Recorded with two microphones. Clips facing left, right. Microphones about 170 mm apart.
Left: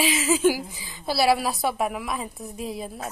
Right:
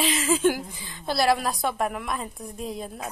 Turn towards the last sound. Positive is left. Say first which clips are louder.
# left 1 dB
turn(degrees=5)  # may be behind; listen again after turning